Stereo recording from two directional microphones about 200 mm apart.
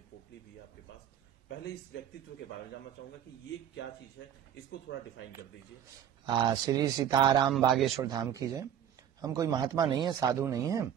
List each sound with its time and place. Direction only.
4.2 s speech: 75° left (ahead or behind)
6.2 s a man's voice: 20° right (ahead or behind)
7.5 s a man's voice: centre (ahead or behind)
8.0 s speech: 15° right (ahead or behind)